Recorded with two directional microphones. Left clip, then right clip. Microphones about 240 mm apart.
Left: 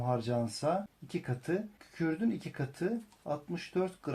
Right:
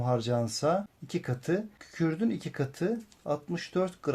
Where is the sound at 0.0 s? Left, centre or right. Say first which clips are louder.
Right 4 dB; right.